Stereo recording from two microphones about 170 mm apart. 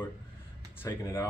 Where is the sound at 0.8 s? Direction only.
15° left (ahead or behind).